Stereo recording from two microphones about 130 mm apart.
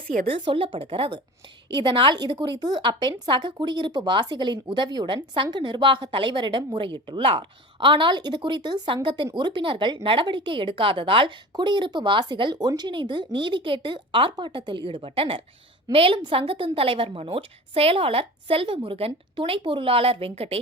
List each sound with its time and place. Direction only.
0.3 s a woman's voice: 40° right (ahead or behind)